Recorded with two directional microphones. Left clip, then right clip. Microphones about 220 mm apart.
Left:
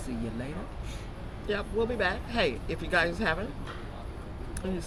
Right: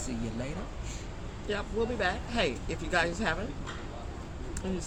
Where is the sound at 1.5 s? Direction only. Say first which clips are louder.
Left 2 dB; 15° left (ahead or behind).